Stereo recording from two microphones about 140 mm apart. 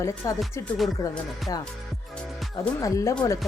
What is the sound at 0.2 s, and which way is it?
Speech, 25° left (ahead or behind).